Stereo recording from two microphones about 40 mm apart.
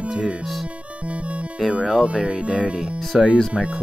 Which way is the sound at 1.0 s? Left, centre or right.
Right.